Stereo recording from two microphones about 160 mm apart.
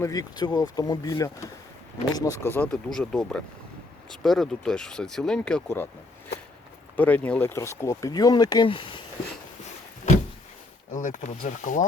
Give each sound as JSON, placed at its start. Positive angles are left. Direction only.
{"t": 0.0, "sound": "speech", "side_deg": 20}
{"t": 6.9, "sound": "speech", "side_deg": 10}
{"t": 10.9, "sound": "speech", "side_deg": 50}